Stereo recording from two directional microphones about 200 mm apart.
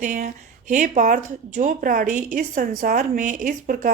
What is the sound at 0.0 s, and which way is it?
A woman's voice, 40° right (ahead or behind).